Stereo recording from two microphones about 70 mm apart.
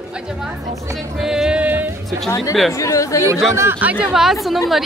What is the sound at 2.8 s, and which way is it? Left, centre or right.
Speech, left.